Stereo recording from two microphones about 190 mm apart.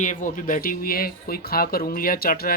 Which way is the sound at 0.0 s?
40° left (ahead or behind).